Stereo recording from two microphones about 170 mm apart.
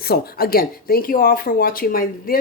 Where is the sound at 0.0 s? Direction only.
65° left (ahead or behind).